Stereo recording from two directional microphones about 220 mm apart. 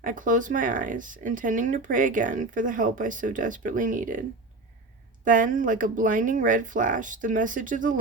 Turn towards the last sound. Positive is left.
turn(degrees=-35)  # may be behind; listen again after turning